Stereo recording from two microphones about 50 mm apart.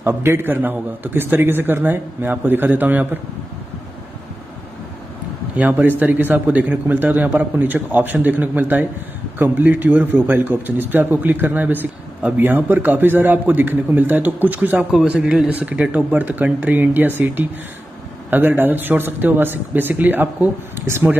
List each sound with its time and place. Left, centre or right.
0.0 s a man's voice: right
5.6 s a man's voice: right
14.9 s a man's voice: centre
15.1 s speech: centre
15.9 s a man's voice: right
20.8 s speech: right